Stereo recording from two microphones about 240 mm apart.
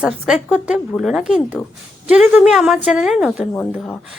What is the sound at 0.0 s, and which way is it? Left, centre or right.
Speech, centre.